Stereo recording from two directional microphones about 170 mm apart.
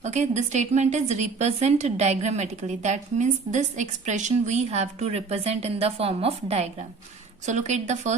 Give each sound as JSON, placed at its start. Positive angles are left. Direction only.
{"t": 0.0, "sound": "a woman's voice", "side_deg": -45}